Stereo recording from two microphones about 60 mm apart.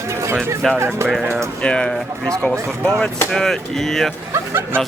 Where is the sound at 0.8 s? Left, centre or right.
Right.